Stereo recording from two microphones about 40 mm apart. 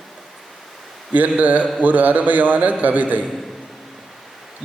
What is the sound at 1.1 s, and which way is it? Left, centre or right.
A man's voice, right.